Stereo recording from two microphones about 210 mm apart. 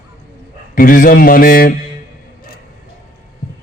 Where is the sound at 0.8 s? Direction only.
40° left (ahead or behind).